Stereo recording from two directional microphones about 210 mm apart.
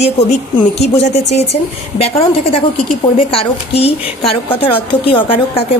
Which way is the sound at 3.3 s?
25° left (ahead or behind).